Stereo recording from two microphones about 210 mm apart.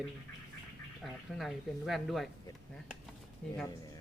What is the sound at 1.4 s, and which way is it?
Speech, centre (ahead or behind).